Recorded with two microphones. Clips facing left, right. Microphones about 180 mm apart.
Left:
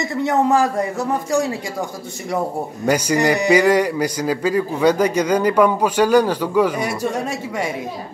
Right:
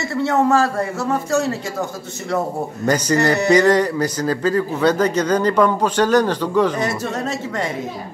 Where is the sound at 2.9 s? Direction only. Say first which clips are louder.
Even; 10° left (ahead or behind).